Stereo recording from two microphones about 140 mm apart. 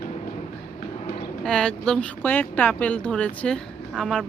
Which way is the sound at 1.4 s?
5° left (ahead or behind).